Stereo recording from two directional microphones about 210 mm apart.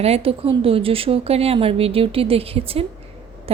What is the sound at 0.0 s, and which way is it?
Speech, 30° right (ahead or behind).